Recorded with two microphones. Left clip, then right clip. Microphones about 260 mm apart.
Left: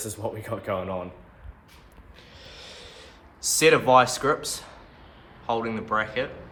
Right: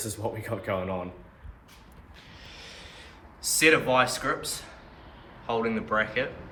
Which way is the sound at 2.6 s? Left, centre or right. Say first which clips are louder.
Left 2 dB; left.